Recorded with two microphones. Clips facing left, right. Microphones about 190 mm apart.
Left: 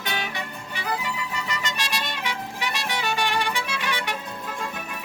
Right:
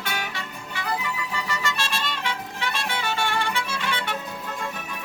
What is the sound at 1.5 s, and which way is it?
Music, 15° left (ahead or behind).